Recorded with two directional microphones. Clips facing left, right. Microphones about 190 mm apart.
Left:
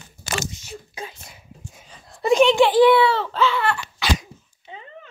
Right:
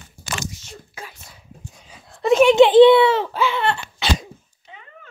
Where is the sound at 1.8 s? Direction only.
5° right (ahead or behind).